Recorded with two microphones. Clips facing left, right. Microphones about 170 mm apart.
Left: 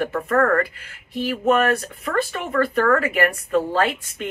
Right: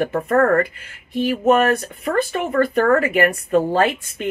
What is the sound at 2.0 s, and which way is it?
Speech, 30° right (ahead or behind).